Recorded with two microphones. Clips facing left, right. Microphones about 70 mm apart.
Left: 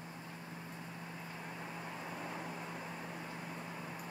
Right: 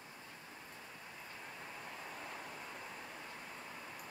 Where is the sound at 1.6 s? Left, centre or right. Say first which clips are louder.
Left 4 dB; centre.